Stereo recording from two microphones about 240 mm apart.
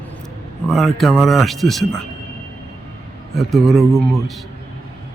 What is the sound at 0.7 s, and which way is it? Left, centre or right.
A man's voice, centre.